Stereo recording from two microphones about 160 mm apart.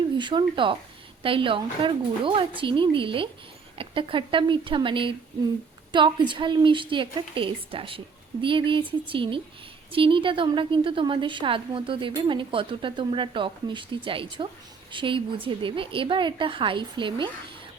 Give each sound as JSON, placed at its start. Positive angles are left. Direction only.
{"t": 0.2, "sound": "a woman's voice", "side_deg": -30}